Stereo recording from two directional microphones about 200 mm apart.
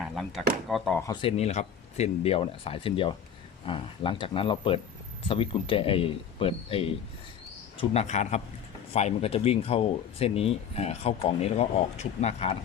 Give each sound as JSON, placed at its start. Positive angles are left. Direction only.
{"t": 0.0, "sound": "speech", "side_deg": 0}
{"t": 0.9, "sound": "speech", "side_deg": 20}
{"t": 1.4, "sound": "speech", "side_deg": 30}